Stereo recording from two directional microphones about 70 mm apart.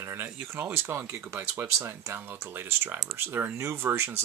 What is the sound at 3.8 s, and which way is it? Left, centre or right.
Speech, right.